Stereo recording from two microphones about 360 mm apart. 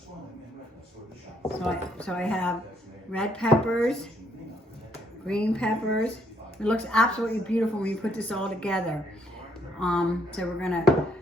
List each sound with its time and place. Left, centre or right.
1.6 s speech: centre
5.2 s speech: centre